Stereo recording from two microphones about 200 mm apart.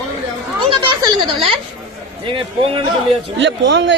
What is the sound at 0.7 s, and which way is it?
Speech, 25° right (ahead or behind).